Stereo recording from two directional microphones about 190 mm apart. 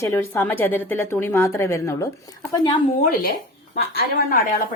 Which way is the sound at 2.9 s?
50° left (ahead or behind).